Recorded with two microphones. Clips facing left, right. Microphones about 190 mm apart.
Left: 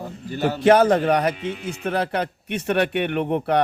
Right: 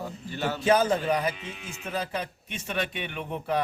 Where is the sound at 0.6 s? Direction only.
70° left (ahead or behind).